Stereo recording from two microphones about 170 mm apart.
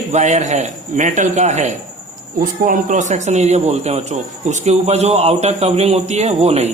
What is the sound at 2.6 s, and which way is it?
A man's voice, 55° right (ahead or behind).